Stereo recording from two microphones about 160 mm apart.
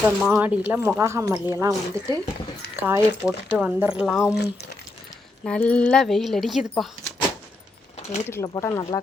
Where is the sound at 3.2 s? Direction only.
10° right (ahead or behind).